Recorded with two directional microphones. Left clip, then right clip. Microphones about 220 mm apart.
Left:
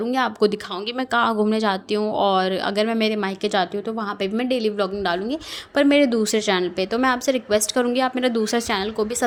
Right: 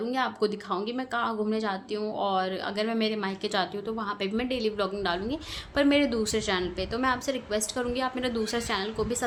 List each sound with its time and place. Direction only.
0.0 s a woman's voice: 30° left (ahead or behind)